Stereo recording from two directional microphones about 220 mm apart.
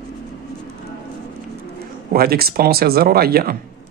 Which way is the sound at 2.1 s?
45° right (ahead or behind).